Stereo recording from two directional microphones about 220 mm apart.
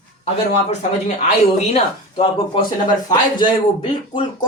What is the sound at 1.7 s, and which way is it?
Speech, 25° left (ahead or behind).